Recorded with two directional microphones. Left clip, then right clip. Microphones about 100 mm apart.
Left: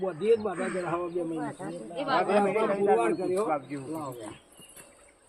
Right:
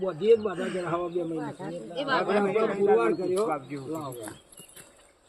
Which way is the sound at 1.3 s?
30° right (ahead or behind).